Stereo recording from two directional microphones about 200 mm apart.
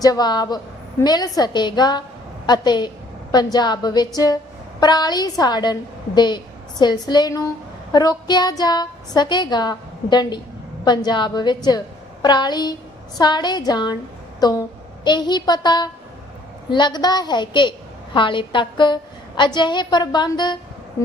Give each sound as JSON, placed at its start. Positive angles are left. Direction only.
{"t": 0.0, "sound": "a woman's voice", "side_deg": 20}